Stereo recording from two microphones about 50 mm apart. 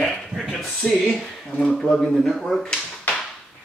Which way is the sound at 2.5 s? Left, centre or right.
Centre.